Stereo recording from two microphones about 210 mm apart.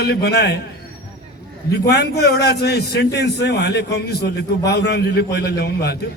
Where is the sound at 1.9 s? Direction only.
50° left (ahead or behind).